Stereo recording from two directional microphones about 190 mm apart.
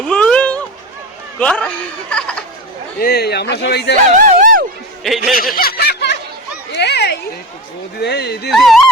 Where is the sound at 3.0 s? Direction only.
55° left (ahead or behind).